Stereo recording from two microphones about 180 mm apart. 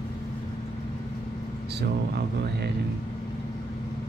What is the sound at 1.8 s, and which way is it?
Speech, 65° right (ahead or behind).